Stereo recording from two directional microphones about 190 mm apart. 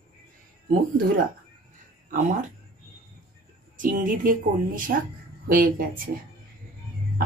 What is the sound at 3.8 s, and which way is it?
Speech, 45° right (ahead or behind).